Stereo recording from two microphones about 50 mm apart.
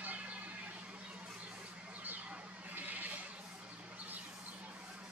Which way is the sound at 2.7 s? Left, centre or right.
Right.